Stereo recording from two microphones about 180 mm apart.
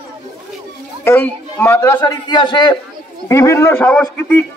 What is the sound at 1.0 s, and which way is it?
A man's voice, 10° left (ahead or behind).